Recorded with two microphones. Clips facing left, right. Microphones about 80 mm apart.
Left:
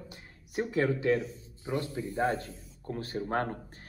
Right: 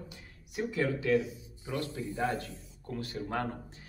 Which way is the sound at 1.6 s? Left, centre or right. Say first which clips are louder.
Left 3 dB; left.